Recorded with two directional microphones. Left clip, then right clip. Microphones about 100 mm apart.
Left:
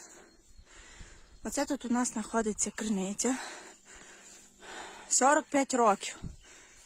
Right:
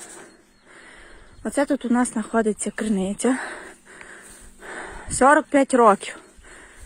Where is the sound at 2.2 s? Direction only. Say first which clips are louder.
Right 10 dB; 15° left (ahead or behind).